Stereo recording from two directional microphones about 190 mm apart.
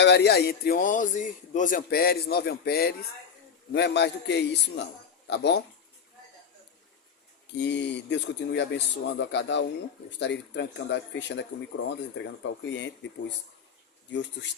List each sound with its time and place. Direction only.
0.0 s speech: 60° left (ahead or behind)
7.4 s speech: 65° left (ahead or behind)